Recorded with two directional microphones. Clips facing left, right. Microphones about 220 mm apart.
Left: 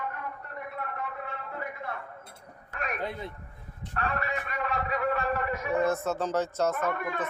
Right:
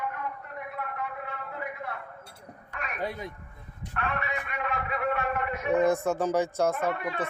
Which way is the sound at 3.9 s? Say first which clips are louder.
Left 1 dB; 35° left (ahead or behind).